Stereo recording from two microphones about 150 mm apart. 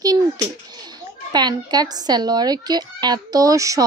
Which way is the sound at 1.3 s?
30° right (ahead or behind).